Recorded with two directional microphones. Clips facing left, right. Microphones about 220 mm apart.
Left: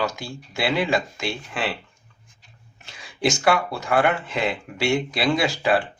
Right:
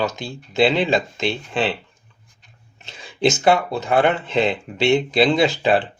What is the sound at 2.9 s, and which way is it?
Speech, 25° right (ahead or behind).